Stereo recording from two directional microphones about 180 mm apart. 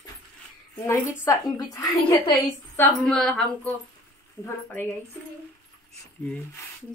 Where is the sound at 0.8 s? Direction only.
15° left (ahead or behind).